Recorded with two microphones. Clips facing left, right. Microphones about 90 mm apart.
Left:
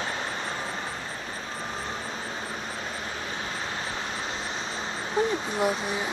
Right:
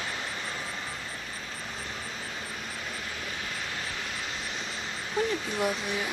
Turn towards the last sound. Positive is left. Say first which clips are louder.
# left 3 dB
turn(degrees=25)  # may be behind; listen again after turning